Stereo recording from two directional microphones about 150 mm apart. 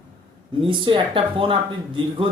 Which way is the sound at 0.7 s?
35° right (ahead or behind).